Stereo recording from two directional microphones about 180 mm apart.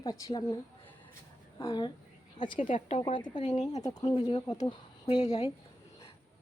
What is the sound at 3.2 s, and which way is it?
Speech, 40° left (ahead or behind).